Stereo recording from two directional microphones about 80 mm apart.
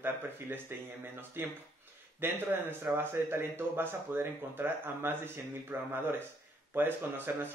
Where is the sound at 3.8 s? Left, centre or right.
Right.